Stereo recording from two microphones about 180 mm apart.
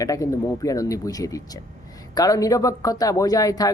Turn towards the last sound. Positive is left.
turn(degrees=20)  # may be behind; listen again after turning